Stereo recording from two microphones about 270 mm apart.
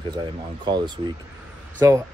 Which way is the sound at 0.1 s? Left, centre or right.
Centre.